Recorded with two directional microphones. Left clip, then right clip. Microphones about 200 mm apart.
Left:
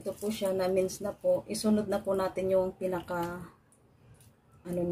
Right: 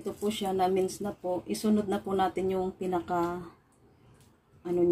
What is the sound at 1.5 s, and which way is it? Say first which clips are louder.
Speech: even; 20° right (ahead or behind).